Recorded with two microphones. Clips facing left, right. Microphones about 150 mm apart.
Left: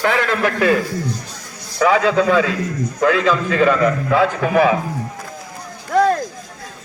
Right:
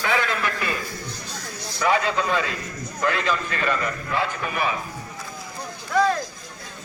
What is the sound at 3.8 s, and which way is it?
Speech, 90° left.